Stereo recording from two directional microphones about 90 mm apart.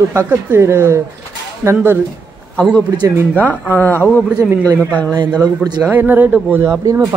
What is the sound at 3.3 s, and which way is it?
Speech, 20° left (ahead or behind).